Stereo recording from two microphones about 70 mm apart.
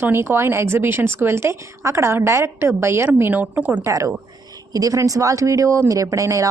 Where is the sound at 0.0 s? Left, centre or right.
Right.